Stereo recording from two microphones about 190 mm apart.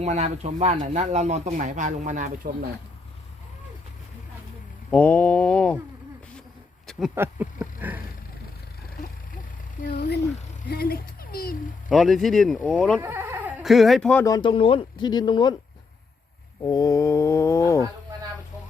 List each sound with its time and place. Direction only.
0.0 s speech: 35° right (ahead or behind)
4.9 s speech: 10° left (ahead or behind)
7.2 s speech: 10° right (ahead or behind)
9.8 s speech: 40° left (ahead or behind)
10.7 s speech: 50° left (ahead or behind)
11.9 s speech: centre (ahead or behind)
13.0 s speech: 10° right (ahead or behind); by 14.3 s 5° left (ahead or behind)
14.3 s speech: 20° left (ahead or behind)
16.6 s speech: 20° left (ahead or behind)